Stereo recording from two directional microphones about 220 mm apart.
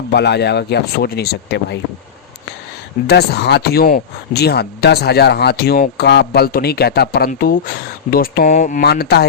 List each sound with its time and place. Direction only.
0.1 s speech: 50° left (ahead or behind)
3.1 s speech: 50° left (ahead or behind)
8.8 s speech: 45° left (ahead or behind)